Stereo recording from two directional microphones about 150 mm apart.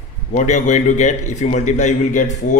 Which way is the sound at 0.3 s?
55° left (ahead or behind).